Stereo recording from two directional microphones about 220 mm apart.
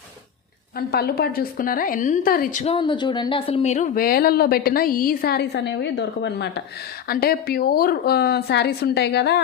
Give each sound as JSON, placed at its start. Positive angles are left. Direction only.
{"t": 0.8, "sound": "speech", "side_deg": 45}
{"t": 2.7, "sound": "a woman's voice", "side_deg": 20}